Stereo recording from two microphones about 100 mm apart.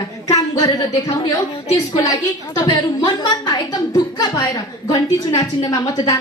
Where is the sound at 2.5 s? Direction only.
45° left (ahead or behind).